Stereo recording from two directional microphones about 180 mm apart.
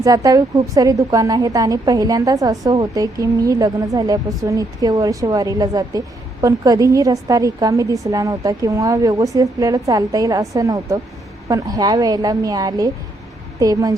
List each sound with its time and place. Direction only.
0.0 s a woman's voice: 20° right (ahead or behind)